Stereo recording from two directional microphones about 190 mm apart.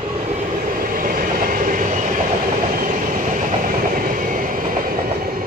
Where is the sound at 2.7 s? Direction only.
45° right (ahead or behind).